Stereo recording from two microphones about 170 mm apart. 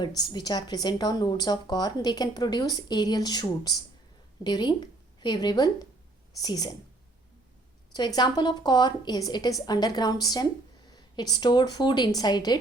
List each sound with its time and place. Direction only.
0.0 s a woman's voice: 25° left (ahead or behind)
7.9 s a woman's voice: 25° left (ahead or behind)